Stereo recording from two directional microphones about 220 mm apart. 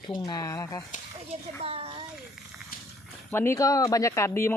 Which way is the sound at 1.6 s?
25° right (ahead or behind).